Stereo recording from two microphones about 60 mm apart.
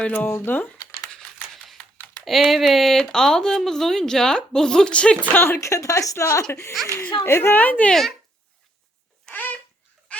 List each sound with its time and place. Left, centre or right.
0.0 s speech: left
0.3 s speech: left
2.2 s speech: centre
5.3 s speech: left
5.5 s speech: left
7.0 s a child's voice: left
7.5 s speech: left
9.3 s babbling: left